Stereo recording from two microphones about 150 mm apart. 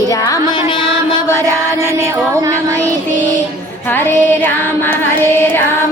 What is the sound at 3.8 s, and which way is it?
Female singing, 10° left (ahead or behind).